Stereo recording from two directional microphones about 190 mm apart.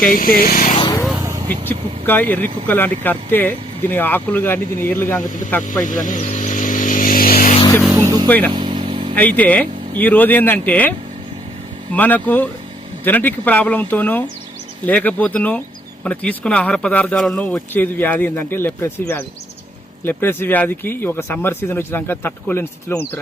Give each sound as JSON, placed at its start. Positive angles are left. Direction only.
{"t": 0.1, "sound": "speech", "side_deg": 50}
{"t": 0.7, "sound": "vehicle", "side_deg": 25}
{"t": 1.2, "sound": "vehicle", "side_deg": -20}
{"t": 1.6, "sound": "speech", "side_deg": 10}
{"t": 5.8, "sound": "a sound", "side_deg": 45}
{"t": 7.9, "sound": "speech", "side_deg": -20}
{"t": 8.5, "sound": "vehicle", "side_deg": -25}
{"t": 9.1, "sound": "speech", "side_deg": 10}
{"t": 11.9, "sound": "speech", "side_deg": 10}